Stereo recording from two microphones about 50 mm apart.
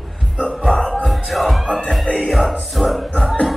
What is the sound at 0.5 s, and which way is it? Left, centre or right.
Music, centre.